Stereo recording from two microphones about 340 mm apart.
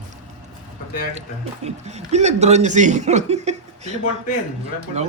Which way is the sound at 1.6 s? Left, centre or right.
Centre.